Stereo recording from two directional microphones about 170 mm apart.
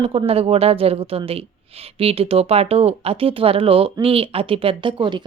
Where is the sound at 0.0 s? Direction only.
35° right (ahead or behind).